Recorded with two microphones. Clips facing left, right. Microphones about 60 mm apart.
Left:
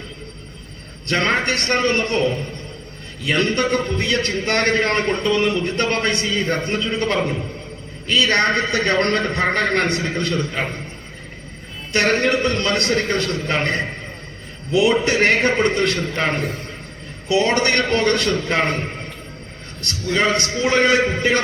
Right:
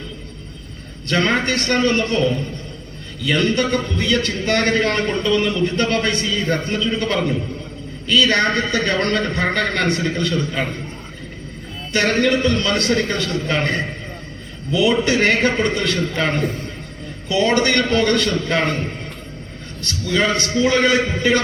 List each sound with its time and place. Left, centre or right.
1.1 s a man's voice: left
12.2 s a man's voice: left
15.0 s a man's voice: left
20.1 s a man's voice: left